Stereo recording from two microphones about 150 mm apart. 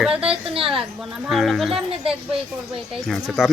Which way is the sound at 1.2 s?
Centre (ahead or behind).